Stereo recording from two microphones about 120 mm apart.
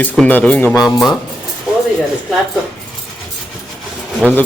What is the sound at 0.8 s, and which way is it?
Speech, 30° left (ahead or behind).